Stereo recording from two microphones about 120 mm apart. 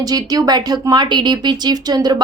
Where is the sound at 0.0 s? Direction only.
30° right (ahead or behind).